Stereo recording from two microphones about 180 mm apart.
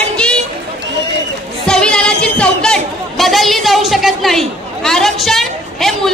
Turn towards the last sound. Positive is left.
turn(degrees=0)  # may be behind; listen again after turning